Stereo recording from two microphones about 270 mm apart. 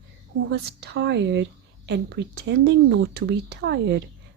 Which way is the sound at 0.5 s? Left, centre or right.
Right.